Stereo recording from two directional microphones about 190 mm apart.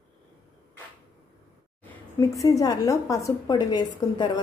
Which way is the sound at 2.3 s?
15° left (ahead or behind).